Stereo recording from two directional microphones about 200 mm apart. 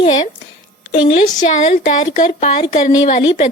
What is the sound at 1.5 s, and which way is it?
Speech, 35° left (ahead or behind).